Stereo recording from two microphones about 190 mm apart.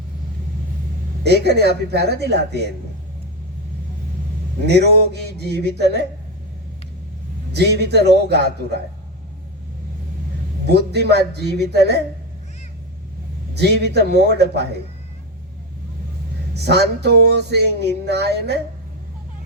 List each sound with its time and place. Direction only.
1.2 s speech: 60° right (ahead or behind)
4.6 s speech: 60° right (ahead or behind)
7.5 s speech: 60° right (ahead or behind)
10.7 s speech: 60° right (ahead or behind)
13.5 s speech: 60° right (ahead or behind)
16.6 s speech: 60° right (ahead or behind)